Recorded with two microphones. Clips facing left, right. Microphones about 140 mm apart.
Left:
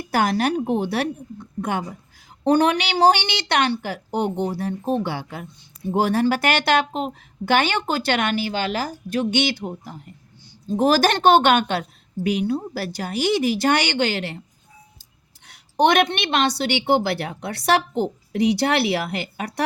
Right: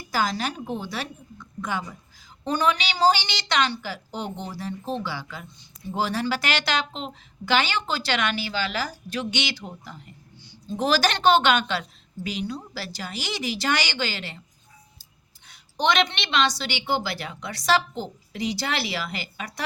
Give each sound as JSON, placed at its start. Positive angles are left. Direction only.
{"t": 0.0, "sound": "a woman's voice", "side_deg": 65}
{"t": 15.4, "sound": "a woman's voice", "side_deg": 60}